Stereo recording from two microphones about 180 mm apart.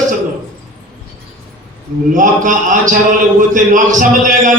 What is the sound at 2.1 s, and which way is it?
A man's voice, 45° right (ahead or behind).